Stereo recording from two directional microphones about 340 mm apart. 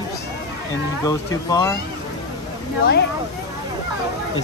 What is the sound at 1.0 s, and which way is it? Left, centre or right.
Speech, centre.